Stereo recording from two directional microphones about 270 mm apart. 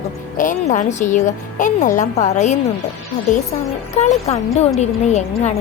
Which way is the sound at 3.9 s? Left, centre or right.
Left.